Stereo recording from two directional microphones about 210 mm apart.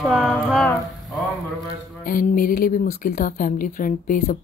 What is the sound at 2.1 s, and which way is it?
A woman's voice, 40° left (ahead or behind).